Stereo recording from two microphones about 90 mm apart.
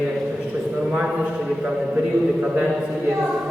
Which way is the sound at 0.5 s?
10° right (ahead or behind).